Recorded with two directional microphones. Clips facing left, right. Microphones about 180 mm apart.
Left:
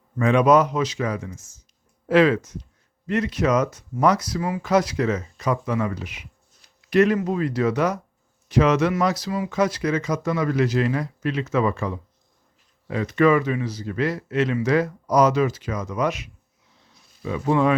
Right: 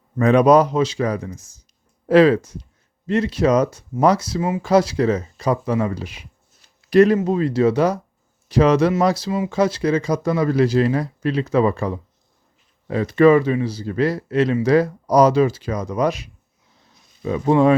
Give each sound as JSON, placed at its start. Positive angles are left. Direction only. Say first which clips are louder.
{"t": 0.2, "sound": "speech", "louder": "right 4 dB", "side_deg": -40}